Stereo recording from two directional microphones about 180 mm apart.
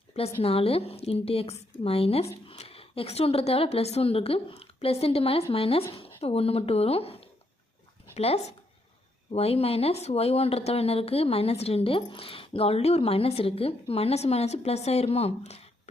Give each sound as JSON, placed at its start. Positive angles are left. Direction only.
{"t": 0.4, "sound": "a woman's voice", "side_deg": 30}